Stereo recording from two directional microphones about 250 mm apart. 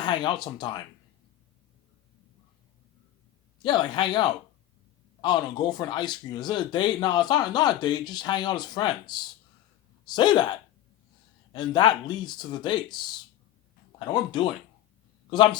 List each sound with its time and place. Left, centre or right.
0.0 s speech: centre
3.6 s speech: centre
14.0 s speech: centre